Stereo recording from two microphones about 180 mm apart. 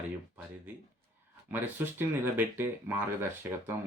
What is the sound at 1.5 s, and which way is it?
Speech, 10° right (ahead or behind).